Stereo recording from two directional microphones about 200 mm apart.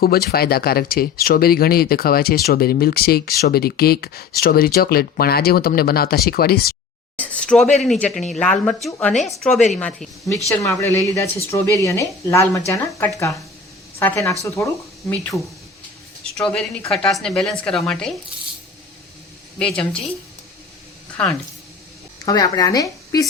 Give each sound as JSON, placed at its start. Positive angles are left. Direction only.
{"t": 0.0, "sound": "speech", "side_deg": 50}
{"t": 7.2, "sound": "a sound", "side_deg": 5}
{"t": 7.8, "sound": "a woman's voice", "side_deg": 5}
{"t": 10.5, "sound": "speech", "side_deg": 15}
{"t": 15.3, "sound": "a woman's voice", "side_deg": 0}
{"t": 19.5, "sound": "a woman's voice", "side_deg": 5}
{"t": 21.2, "sound": "a woman's voice", "side_deg": 5}
{"t": 22.3, "sound": "speech", "side_deg": 20}